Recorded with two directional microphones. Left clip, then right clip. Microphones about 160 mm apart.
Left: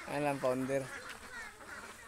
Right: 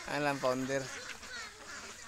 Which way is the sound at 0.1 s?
5° right (ahead or behind).